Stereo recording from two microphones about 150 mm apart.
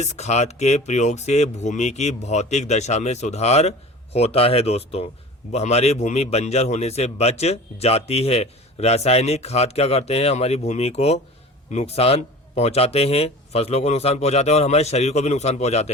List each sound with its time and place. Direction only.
0.0 s a man's voice: 50° left (ahead or behind)